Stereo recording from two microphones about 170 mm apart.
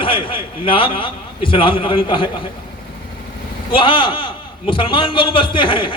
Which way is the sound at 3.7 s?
30° left (ahead or behind).